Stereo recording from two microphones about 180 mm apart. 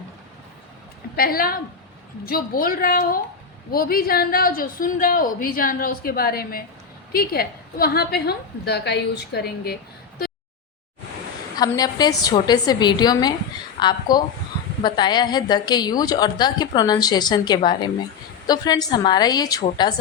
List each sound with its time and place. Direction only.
1.1 s a woman's voice: 55° left (ahead or behind)
11.5 s a woman's voice: 20° left (ahead or behind)